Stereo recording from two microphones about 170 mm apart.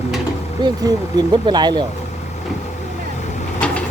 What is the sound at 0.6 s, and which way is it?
Speech, 25° right (ahead or behind).